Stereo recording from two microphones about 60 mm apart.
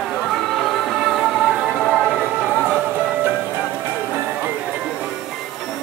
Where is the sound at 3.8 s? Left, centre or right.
Right.